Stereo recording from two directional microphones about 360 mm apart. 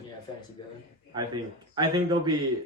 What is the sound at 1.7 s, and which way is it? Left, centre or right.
Speech, centre.